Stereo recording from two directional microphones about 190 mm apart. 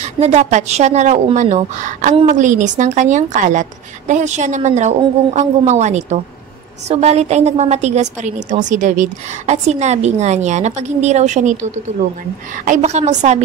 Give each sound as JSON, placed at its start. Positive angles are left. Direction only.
{"t": 0.0, "sound": "a woman's voice", "side_deg": -35}